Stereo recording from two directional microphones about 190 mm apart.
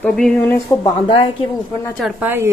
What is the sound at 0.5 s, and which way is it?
Speech, 15° left (ahead or behind).